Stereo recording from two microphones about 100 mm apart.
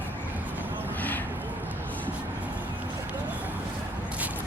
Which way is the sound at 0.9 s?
20° left (ahead or behind).